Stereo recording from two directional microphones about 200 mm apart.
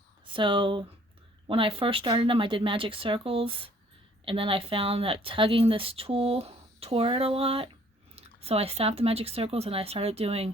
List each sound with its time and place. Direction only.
0.3 s speech: 25° right (ahead or behind)